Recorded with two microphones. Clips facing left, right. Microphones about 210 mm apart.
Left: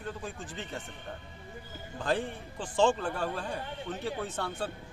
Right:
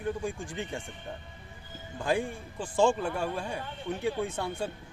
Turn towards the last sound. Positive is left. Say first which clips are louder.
# right 4 dB
turn(degrees=-10)  # may be behind; listen again after turning